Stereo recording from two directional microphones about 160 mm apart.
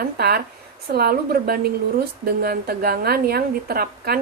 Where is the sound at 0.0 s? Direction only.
75° right (ahead or behind).